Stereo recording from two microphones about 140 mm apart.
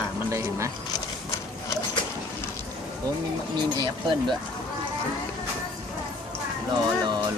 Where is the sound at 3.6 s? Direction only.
35° right (ahead or behind).